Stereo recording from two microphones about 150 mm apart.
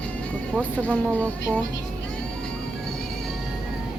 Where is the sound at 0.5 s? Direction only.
10° left (ahead or behind).